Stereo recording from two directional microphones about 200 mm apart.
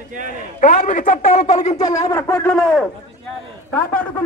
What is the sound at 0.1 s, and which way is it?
Speech, 40° right (ahead or behind).